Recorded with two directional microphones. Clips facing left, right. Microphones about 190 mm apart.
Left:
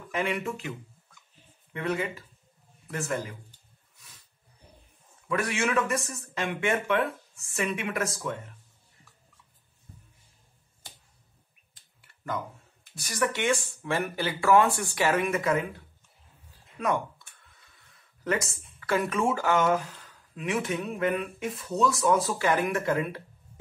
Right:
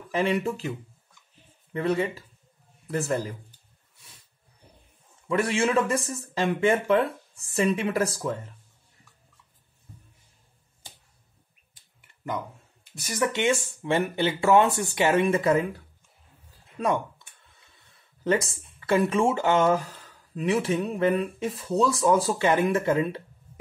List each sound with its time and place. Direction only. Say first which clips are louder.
0.1 s speech: right 5 dB; 30° right (ahead or behind)
5.3 s speech: right 4 dB; 30° right (ahead or behind)
12.0 s a sound: right 2 dB; 20° right (ahead or behind)
13.0 s speech: right 3 dB; 20° right (ahead or behind)
17.9 s speech: right 5 dB; 30° right (ahead or behind)